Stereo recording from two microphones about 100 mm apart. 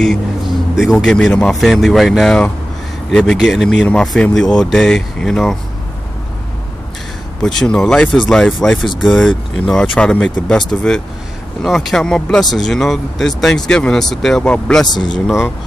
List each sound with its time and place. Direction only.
0.8 s speech: 10° left (ahead or behind)
7.4 s speech: 5° left (ahead or behind)
14.9 s speech: 45° left (ahead or behind)